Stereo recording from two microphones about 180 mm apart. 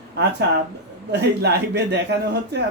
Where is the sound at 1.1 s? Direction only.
70° right (ahead or behind).